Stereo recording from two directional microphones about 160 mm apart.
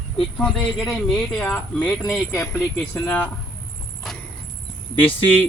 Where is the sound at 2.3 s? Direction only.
15° left (ahead or behind).